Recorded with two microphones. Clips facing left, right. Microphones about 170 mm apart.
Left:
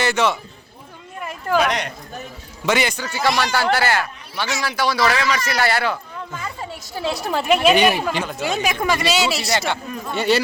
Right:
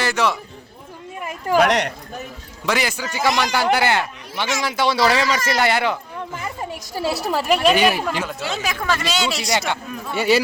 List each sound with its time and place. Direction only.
0.0 s a man's voice: centre (ahead or behind)
1.5 s speech: 70° right (ahead or behind)
2.6 s speech: centre (ahead or behind)
3.0 s a man's voice: 15° right (ahead or behind)
8.4 s speech: 15° left (ahead or behind); by 10.4 s 5° right (ahead or behind)